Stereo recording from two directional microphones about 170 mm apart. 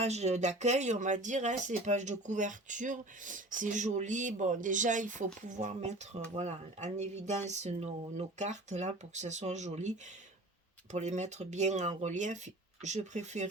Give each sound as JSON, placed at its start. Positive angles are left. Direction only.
{"t": 0.0, "sound": "speech", "side_deg": -40}
{"t": 10.9, "sound": "speech", "side_deg": -45}